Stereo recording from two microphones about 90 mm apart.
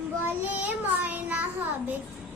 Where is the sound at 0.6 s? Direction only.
20° right (ahead or behind).